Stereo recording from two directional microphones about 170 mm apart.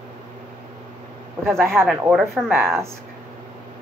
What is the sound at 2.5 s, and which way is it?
Speech, 15° right (ahead or behind).